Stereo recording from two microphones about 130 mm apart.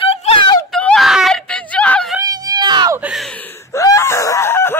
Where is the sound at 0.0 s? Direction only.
45° left (ahead or behind).